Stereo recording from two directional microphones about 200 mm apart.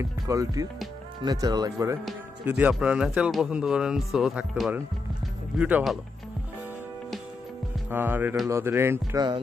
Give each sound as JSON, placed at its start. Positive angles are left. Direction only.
{"t": 0.0, "sound": "music", "side_deg": -15}
{"t": 2.0, "sound": "speech", "side_deg": -5}
{"t": 7.9, "sound": "music", "side_deg": -10}